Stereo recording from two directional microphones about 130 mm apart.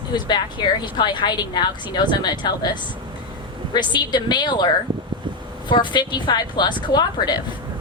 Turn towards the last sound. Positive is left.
turn(degrees=35)  # may be behind; listen again after turning